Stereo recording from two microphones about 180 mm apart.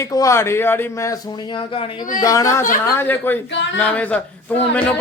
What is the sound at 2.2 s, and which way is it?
A man's voice, 20° left (ahead or behind).